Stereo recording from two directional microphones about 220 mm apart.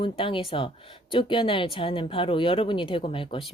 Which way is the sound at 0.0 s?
25° left (ahead or behind).